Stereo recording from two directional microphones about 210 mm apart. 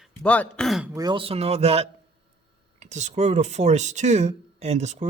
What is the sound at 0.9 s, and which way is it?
Speech, 20° right (ahead or behind).